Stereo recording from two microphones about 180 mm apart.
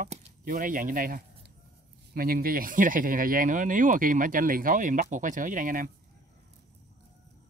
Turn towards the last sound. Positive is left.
turn(degrees=-50)  # may be behind; listen again after turning